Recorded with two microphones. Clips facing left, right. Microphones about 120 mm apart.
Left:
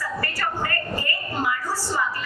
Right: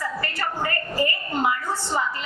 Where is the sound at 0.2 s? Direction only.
20° right (ahead or behind).